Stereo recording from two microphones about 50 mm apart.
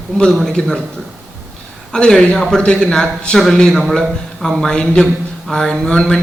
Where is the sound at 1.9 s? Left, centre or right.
Centre.